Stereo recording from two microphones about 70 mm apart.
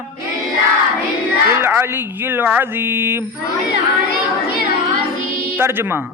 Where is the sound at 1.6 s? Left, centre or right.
Right.